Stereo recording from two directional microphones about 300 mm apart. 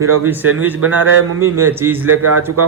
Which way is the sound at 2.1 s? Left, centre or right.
Right.